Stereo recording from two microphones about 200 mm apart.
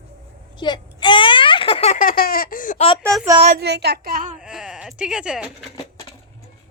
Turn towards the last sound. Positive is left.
turn(degrees=-5)  # may be behind; listen again after turning